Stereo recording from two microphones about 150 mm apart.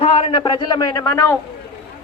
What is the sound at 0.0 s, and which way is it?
A man's voice, 40° left (ahead or behind).